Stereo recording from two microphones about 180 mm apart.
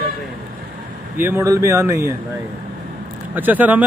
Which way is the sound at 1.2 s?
15° right (ahead or behind).